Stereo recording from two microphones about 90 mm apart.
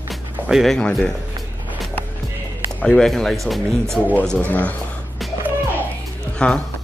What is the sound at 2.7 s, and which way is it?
Speech, 10° left (ahead or behind).